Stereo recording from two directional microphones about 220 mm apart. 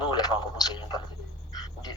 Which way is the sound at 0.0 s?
20° left (ahead or behind).